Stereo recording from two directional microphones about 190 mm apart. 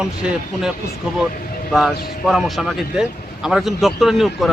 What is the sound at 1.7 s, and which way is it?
Speech, centre (ahead or behind).